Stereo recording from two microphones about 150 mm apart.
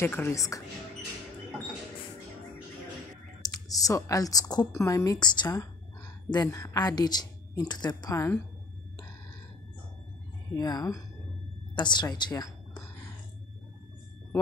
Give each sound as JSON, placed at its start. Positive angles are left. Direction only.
{"t": 0.0, "sound": "a woman's voice", "side_deg": 15}
{"t": 3.4, "sound": "a woman's voice", "side_deg": 25}
{"t": 10.5, "sound": "a woman's voice", "side_deg": 25}